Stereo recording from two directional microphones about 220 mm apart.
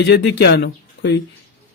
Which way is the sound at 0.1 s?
50° left (ahead or behind).